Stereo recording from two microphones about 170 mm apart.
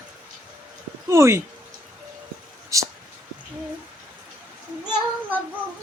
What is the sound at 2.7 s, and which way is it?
Speech, 20° right (ahead or behind).